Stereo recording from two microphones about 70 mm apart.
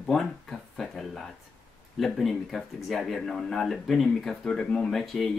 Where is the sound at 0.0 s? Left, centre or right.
Centre.